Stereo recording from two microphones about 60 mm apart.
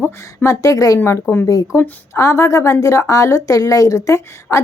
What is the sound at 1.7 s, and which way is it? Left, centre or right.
Speech, left.